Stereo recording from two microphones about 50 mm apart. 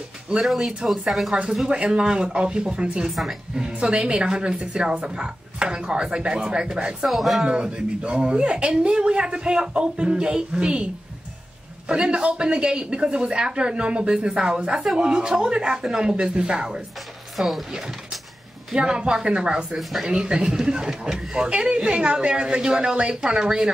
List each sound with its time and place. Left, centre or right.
0.4 s speech: centre
7.1 s speech: centre
7.4 s speech: centre
11.9 s speech: centre
17.4 s speech: centre
17.6 s speech: centre
19.8 s speech: centre
20.1 s speech: centre